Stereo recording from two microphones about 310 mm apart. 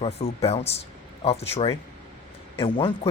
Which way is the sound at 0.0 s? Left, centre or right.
Centre.